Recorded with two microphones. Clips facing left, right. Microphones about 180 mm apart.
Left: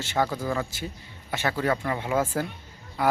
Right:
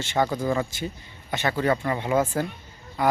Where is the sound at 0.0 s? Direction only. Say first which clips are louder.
Right 2 dB; 5° left (ahead or behind).